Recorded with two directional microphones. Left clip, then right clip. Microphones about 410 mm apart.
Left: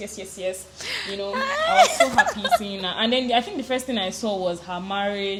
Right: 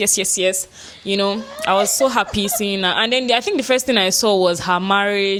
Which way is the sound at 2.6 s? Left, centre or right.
Right.